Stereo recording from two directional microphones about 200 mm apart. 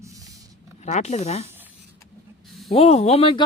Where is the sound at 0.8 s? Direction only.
35° left (ahead or behind).